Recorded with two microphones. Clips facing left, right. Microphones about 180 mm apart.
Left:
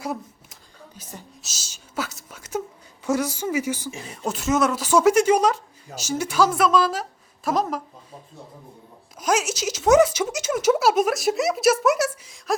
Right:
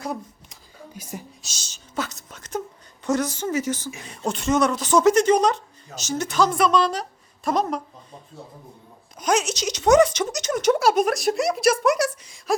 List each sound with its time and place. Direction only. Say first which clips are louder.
0.0 s a sound: even; 5° left (ahead or behind)
0.9 s speech: right 6 dB; 10° right (ahead or behind)
1.4 s a woman's voice: even; 5° left (ahead or behind)
9.1 s speech: right 1 dB; 5° left (ahead or behind)